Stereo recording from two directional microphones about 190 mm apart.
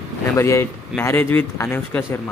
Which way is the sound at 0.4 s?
15° left (ahead or behind).